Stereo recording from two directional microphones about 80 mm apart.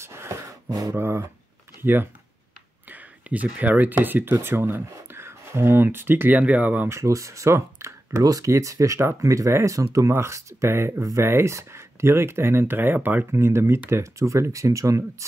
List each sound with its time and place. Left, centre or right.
0.0 s a sound: right
0.9 s speech: right
6.9 s speech: right